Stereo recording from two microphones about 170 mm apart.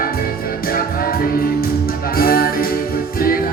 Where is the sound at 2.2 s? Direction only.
60° left (ahead or behind).